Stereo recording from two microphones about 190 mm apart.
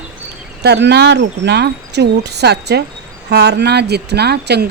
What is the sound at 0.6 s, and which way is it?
A woman's voice, 60° right (ahead or behind).